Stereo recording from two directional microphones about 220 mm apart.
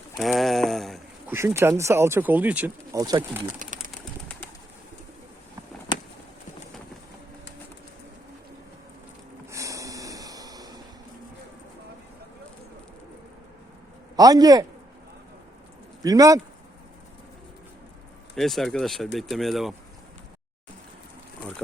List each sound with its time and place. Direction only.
0.2 s a sound: centre (ahead or behind)
1.3 s speech: 10° right (ahead or behind)
9.5 s snort: 15° right (ahead or behind)
14.2 s speech: 15° right (ahead or behind)
16.0 s speech: 15° right (ahead or behind)
18.3 s speech: centre (ahead or behind)